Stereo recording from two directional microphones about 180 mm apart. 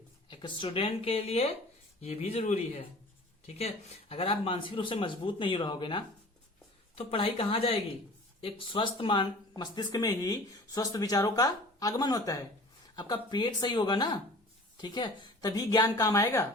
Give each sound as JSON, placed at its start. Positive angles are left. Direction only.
{"t": 0.3, "sound": "speech", "side_deg": 25}